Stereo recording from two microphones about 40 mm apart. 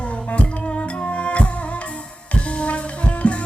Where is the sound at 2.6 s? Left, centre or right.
Left.